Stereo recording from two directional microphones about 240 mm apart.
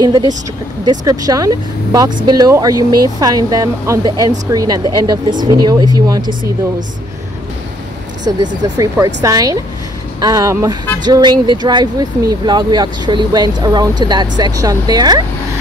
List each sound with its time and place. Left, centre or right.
0.0 s speech: centre
8.2 s speech: centre